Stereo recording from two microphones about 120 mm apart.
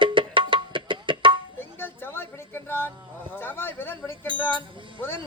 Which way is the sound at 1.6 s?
20° left (ahead or behind).